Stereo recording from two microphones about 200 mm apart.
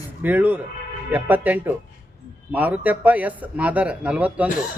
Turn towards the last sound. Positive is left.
turn(degrees=-5)  # may be behind; listen again after turning